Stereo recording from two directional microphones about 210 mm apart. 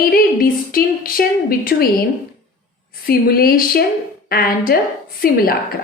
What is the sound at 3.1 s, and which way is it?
A woman's voice, 45° left (ahead or behind).